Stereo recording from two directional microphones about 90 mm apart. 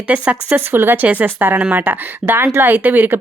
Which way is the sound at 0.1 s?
15° right (ahead or behind).